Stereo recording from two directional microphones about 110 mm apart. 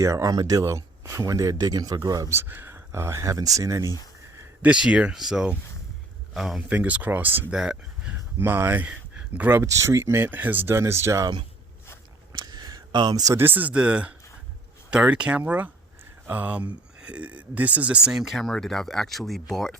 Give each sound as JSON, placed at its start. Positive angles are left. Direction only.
{"t": 0.0, "sound": "speech", "side_deg": -30}
{"t": 2.3, "sound": "speech", "side_deg": -20}
{"t": 4.6, "sound": "speech", "side_deg": -10}
{"t": 7.5, "sound": "speech", "side_deg": -5}
{"t": 8.4, "sound": "speech", "side_deg": -20}
{"t": 12.3, "sound": "a sound", "side_deg": -40}
{"t": 13.3, "sound": "speech", "side_deg": -20}